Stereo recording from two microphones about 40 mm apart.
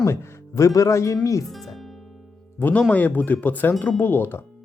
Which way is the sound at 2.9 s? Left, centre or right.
Left.